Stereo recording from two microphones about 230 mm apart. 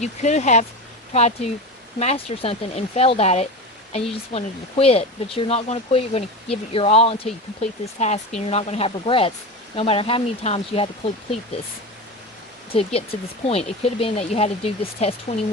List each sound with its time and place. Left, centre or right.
0.0 s speech: left
12.7 s speech: left